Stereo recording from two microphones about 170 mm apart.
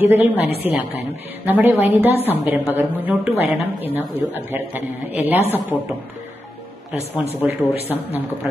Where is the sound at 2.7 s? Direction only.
10° right (ahead or behind).